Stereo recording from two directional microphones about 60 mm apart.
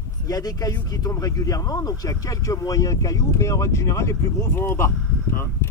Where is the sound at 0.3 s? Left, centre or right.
Left.